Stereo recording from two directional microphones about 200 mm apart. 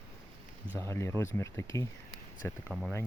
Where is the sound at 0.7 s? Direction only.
10° left (ahead or behind).